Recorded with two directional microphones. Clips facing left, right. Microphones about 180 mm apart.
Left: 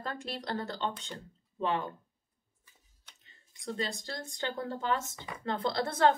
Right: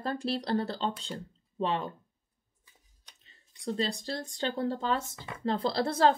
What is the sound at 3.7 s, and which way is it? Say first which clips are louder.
Speech: right 4 dB; 35° right (ahead or behind).